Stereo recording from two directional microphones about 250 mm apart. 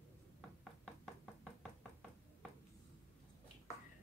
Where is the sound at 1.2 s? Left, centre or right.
Centre.